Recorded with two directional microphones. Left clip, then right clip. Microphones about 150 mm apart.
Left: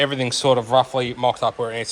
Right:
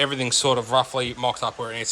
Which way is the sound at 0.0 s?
15° right (ahead or behind).